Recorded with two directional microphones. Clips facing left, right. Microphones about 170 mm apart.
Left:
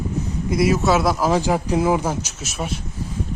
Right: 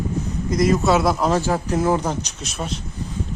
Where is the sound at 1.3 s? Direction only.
15° left (ahead or behind).